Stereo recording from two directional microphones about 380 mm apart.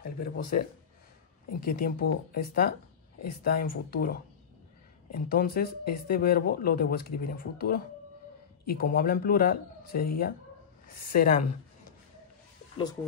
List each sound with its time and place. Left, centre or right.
0.2 s speech: left
1.7 s speech: left